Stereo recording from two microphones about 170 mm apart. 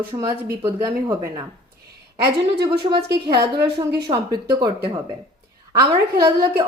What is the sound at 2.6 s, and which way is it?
Speech, 75° right (ahead or behind).